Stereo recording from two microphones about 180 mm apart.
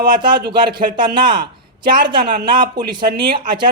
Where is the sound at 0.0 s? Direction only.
25° right (ahead or behind).